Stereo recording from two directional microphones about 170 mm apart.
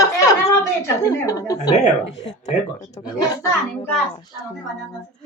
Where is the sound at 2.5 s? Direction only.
40° left (ahead or behind).